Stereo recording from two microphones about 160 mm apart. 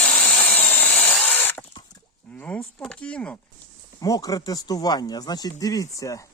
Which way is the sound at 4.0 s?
20° left (ahead or behind).